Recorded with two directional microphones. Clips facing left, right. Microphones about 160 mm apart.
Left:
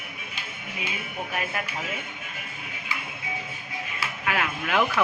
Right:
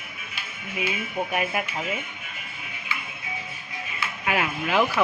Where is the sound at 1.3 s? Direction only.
15° right (ahead or behind).